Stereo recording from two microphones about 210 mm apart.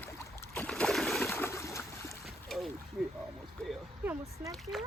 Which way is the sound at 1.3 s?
10° left (ahead or behind).